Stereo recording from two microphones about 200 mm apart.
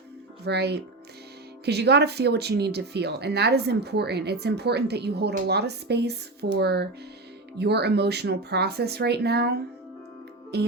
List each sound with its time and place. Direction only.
0.4 s speech: 55° right (ahead or behind)
10.5 s music: 55° right (ahead or behind)